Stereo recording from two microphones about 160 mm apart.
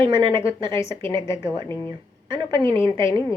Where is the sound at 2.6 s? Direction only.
35° right (ahead or behind).